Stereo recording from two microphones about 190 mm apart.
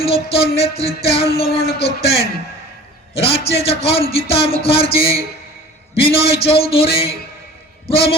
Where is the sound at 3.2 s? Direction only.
30° left (ahead or behind).